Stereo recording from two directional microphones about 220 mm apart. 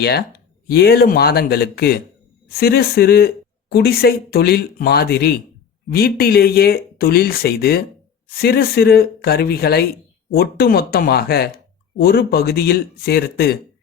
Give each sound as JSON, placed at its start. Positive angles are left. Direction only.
{"t": 0.0, "sound": "speech", "side_deg": 45}